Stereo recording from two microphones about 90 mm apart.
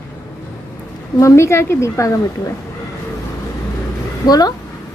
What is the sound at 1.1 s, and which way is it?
A woman's voice, 35° left (ahead or behind).